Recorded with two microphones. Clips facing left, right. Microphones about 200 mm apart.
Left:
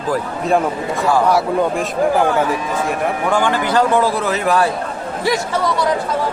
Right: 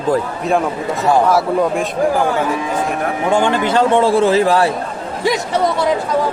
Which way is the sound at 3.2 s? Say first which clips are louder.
Right 3 dB; 25° right (ahead or behind).